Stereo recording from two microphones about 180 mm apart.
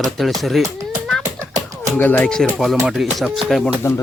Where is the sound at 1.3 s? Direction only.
20° right (ahead or behind).